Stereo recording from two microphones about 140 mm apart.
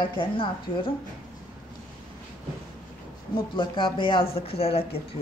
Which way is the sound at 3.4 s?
40° left (ahead or behind).